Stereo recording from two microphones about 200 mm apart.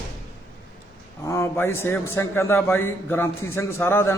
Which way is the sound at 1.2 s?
15° left (ahead or behind).